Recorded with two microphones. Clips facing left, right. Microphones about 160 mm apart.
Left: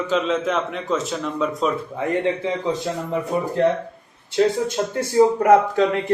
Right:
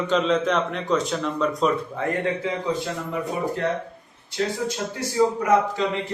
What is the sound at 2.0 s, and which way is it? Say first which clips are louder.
Speech: left 3 dB; 20° left (ahead or behind).